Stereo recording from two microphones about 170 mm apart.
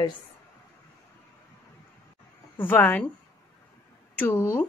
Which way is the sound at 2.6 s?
10° left (ahead or behind).